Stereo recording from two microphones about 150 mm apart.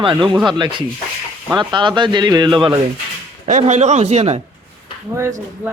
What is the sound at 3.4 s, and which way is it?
Speech, 50° right (ahead or behind).